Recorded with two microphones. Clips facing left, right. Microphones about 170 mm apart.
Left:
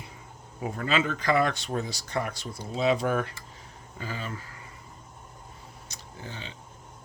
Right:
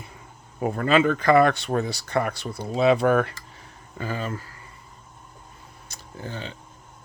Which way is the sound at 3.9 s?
50° right (ahead or behind).